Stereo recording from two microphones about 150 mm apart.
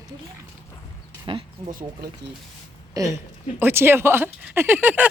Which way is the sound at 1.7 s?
70° right (ahead or behind).